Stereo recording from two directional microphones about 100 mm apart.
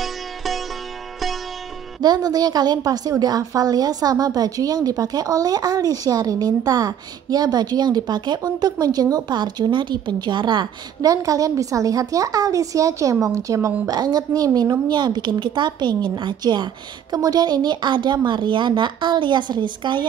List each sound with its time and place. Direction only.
0.0 s music: centre (ahead or behind)
2.0 s a woman's voice: 45° right (ahead or behind)